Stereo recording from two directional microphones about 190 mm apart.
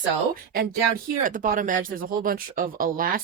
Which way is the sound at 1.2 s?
45° right (ahead or behind).